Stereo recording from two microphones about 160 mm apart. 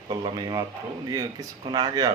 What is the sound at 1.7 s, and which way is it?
Speech, 25° right (ahead or behind).